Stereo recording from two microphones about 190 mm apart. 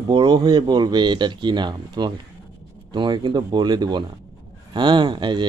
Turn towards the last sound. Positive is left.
turn(degrees=-25)  # may be behind; listen again after turning